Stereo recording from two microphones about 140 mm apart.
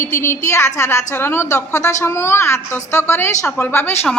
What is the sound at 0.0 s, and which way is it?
A woman's voice, 15° left (ahead or behind).